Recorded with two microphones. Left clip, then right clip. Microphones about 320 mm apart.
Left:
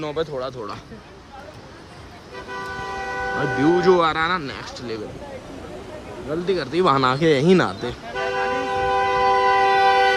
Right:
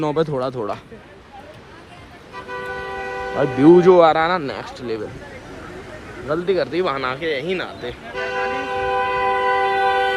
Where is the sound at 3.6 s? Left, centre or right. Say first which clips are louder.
Right 7 dB; centre.